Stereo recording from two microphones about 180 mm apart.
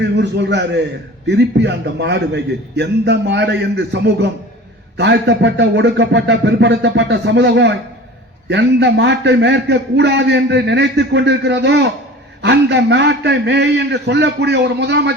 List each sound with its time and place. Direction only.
0.0 s a man's voice: 75° right (ahead or behind)